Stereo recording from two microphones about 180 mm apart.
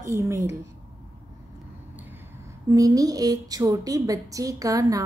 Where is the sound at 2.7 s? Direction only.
20° right (ahead or behind).